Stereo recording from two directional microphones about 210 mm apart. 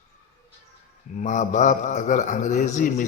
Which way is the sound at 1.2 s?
35° left (ahead or behind).